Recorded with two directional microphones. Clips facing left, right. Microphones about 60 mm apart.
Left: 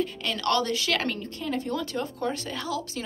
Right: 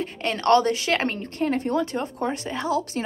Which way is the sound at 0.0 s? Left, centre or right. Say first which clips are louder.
Right 3 dB; right.